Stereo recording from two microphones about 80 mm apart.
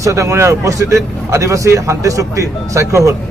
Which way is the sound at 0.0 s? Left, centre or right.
Right.